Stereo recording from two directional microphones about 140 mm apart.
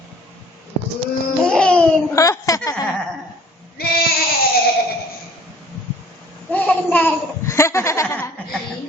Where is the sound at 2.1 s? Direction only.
25° left (ahead or behind).